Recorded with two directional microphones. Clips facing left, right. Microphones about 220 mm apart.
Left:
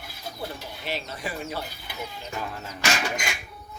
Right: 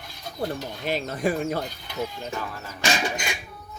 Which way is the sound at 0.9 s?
50° right (ahead or behind).